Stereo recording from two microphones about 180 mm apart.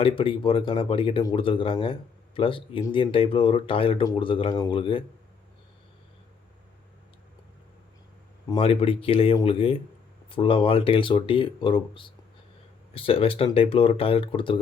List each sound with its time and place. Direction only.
0.0 s speech: 30° left (ahead or behind)
8.4 s speech: 30° left (ahead or behind)